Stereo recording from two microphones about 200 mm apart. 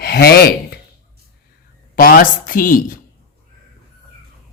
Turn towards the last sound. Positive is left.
turn(degrees=45)  # may be behind; listen again after turning